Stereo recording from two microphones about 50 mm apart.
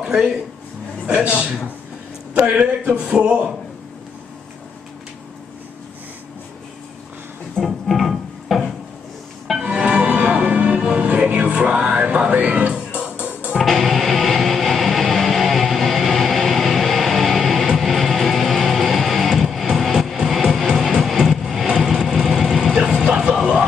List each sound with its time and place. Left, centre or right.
0.0 s a man's voice: centre
2.3 s speech: right
7.5 s music: centre
9.6 s music: right
10.8 s music: centre
11.1 s music: right
13.6 s music: centre
20.2 s music: centre
21.7 s vehicle: centre
22.8 s music: centre